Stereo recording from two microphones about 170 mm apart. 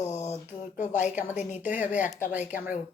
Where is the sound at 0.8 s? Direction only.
45° left (ahead or behind).